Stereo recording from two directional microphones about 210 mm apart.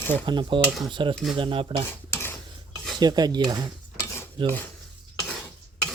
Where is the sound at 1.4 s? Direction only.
25° right (ahead or behind).